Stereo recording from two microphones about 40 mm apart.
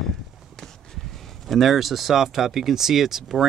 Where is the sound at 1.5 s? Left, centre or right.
Centre.